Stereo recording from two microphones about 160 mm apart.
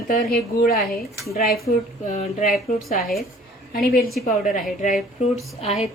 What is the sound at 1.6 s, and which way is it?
A woman's voice, 50° left (ahead or behind).